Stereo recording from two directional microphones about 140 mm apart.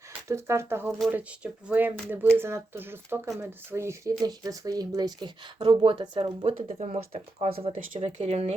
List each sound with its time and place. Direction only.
0.3 s speech: 20° right (ahead or behind); by 6.5 s 40° right (ahead or behind)
6.6 s speech: 50° right (ahead or behind)